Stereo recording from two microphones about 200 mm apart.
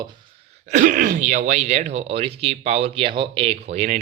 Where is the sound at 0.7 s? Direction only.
40° right (ahead or behind).